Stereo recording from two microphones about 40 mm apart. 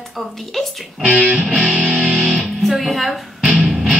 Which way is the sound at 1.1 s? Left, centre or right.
Right.